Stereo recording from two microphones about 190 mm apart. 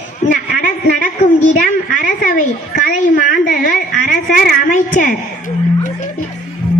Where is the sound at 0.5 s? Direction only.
45° left (ahead or behind).